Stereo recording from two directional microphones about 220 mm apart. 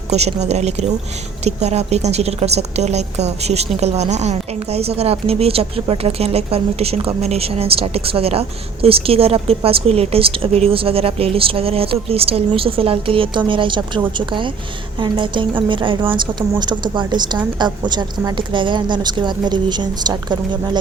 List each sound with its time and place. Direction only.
0.1 s a woman's voice: 30° right (ahead or behind)